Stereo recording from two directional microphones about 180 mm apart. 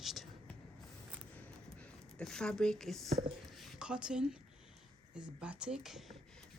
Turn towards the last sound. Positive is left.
turn(degrees=0)  # may be behind; listen again after turning